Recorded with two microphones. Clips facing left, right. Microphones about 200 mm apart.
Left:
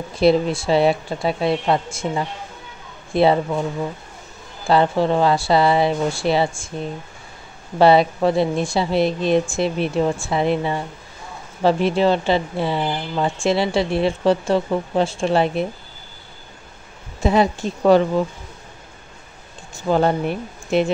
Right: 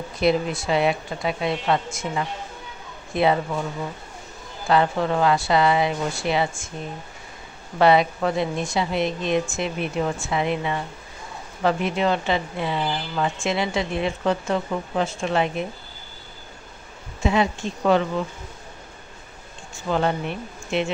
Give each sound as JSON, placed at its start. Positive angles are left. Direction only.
{"t": 0.2, "sound": "speech", "side_deg": 30}
{"t": 4.6, "sound": "speech", "side_deg": 30}
{"t": 7.8, "sound": "speech", "side_deg": 30}
{"t": 17.2, "sound": "speech", "side_deg": 35}
{"t": 19.9, "sound": "speech", "side_deg": 40}